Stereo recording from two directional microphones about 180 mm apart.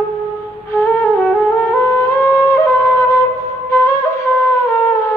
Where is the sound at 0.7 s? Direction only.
15° left (ahead or behind).